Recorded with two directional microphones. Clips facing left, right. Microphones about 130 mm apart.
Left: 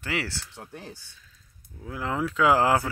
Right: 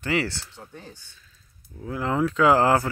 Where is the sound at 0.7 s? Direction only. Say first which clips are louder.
Left 2 dB; 80° left.